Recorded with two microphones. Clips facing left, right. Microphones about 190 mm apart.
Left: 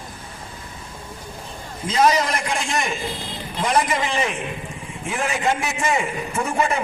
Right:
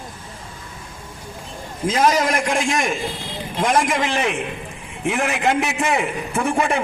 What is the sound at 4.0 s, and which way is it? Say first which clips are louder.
A man's voice: right 2 dB; 75° right (ahead or behind).